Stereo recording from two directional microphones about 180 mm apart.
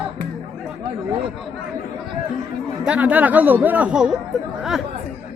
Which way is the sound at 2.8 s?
5° right (ahead or behind).